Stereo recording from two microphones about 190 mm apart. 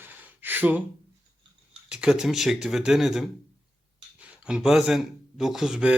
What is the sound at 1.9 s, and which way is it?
Speech, 5° right (ahead or behind).